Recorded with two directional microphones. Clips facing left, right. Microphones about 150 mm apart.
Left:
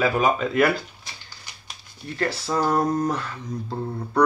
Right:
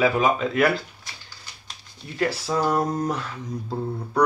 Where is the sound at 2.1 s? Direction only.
10° right (ahead or behind).